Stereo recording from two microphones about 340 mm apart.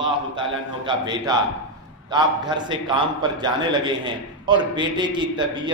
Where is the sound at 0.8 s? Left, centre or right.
Centre.